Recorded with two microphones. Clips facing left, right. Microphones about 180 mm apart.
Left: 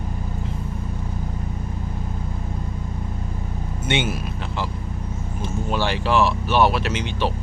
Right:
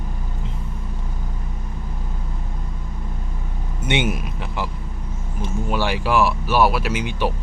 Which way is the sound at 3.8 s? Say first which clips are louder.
Right 2 dB; 15° right (ahead or behind).